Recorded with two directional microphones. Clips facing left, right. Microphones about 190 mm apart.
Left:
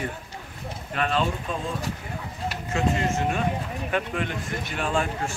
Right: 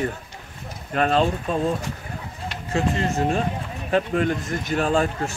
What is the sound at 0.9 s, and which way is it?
Speech, 40° right (ahead or behind).